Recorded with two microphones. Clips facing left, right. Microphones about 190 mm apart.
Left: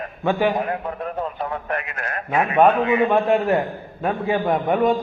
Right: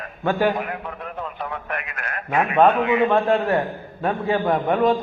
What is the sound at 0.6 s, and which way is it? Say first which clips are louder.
A man's voice: left 4 dB; 40° left (ahead or behind).